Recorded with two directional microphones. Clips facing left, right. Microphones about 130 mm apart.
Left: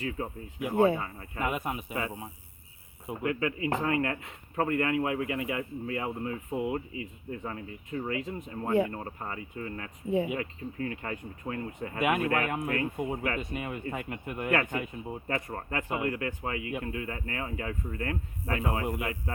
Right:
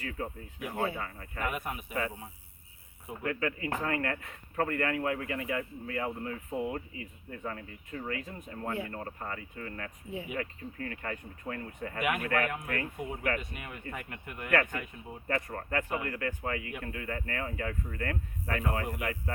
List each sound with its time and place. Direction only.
0.0 s speech: 20° left (ahead or behind)